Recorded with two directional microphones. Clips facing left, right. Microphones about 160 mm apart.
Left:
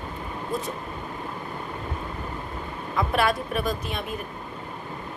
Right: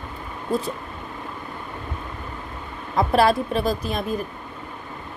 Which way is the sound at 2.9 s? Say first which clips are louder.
Right 6 dB; 35° right (ahead or behind).